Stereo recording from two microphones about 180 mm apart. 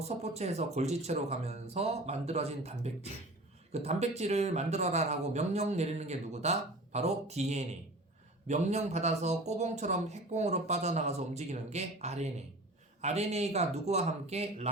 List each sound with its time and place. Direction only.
0.0 s speech: 35° right (ahead or behind)